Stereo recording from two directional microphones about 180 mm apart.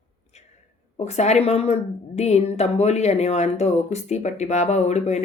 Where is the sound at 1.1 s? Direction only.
35° left (ahead or behind).